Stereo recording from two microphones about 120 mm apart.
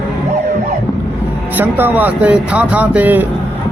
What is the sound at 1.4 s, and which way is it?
Speech, 15° right (ahead or behind).